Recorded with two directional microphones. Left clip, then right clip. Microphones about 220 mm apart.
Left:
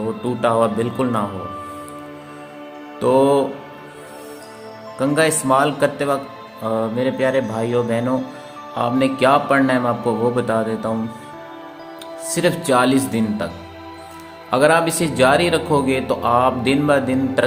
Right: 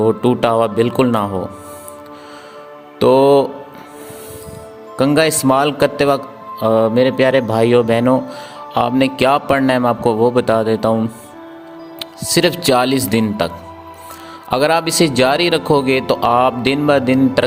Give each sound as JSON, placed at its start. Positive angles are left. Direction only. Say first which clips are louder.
{"t": 0.2, "sound": "speech", "louder": "right 3 dB", "side_deg": -45}
{"t": 3.0, "sound": "speech", "louder": "right 5 dB", "side_deg": -45}
{"t": 4.9, "sound": "speech", "louder": "right 4 dB", "side_deg": -45}
{"t": 11.9, "sound": "speech", "louder": "right 8 dB", "side_deg": -45}
{"t": 14.5, "sound": "speech", "louder": "right 1 dB", "side_deg": -45}